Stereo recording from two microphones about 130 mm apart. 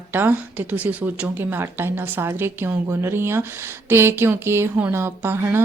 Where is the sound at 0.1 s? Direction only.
15° right (ahead or behind).